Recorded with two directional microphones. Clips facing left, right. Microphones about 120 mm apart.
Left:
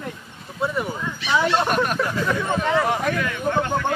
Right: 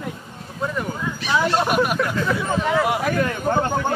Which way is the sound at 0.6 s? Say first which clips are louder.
Left 1 dB; 5° left (ahead or behind).